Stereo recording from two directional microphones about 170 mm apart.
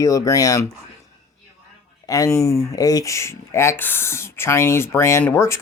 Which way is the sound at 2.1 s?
20° left (ahead or behind).